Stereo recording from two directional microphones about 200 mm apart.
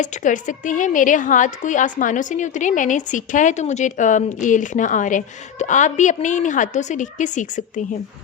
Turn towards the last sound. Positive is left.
turn(degrees=40)  # may be behind; listen again after turning